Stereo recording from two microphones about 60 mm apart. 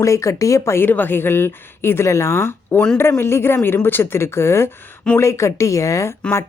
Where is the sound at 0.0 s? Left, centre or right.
Left.